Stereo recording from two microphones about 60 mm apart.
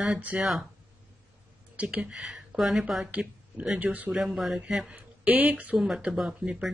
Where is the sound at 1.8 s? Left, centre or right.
Centre.